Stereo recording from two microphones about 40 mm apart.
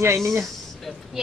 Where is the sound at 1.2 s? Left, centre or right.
Centre.